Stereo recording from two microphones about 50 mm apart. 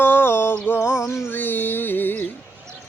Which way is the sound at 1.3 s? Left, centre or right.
Left.